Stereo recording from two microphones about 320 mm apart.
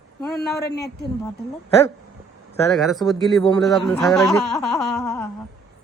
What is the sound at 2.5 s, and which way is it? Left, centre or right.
Speech, centre.